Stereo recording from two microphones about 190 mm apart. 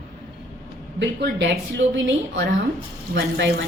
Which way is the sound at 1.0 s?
70° right (ahead or behind).